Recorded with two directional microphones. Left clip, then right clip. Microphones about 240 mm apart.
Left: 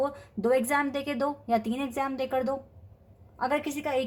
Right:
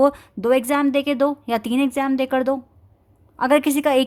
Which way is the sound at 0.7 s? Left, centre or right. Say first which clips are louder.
Right 8 dB; right.